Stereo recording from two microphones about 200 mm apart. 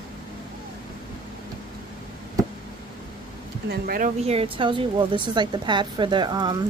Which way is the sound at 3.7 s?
45° right (ahead or behind).